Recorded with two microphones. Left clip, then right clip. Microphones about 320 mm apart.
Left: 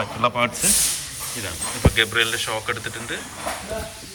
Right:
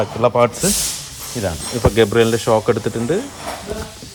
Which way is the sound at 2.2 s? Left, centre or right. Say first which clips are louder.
Right 7 dB; centre.